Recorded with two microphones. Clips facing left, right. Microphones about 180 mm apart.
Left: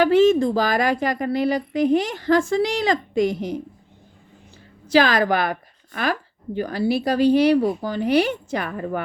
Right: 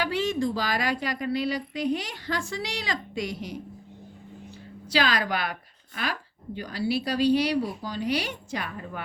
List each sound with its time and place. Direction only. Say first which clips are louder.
0.0 s a woman's voice: left 11 dB; 50° left (ahead or behind)
4.9 s a woman's voice: left 8 dB; 50° left (ahead or behind)